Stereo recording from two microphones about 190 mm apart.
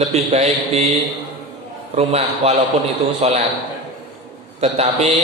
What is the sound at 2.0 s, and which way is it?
A man's voice, 35° right (ahead or behind).